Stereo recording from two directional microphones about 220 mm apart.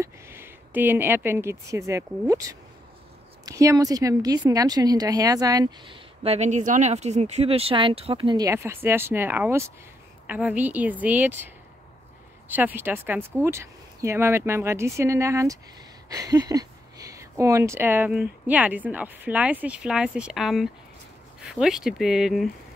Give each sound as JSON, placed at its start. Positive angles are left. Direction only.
{"t": 0.0, "sound": "a woman's voice", "side_deg": -10}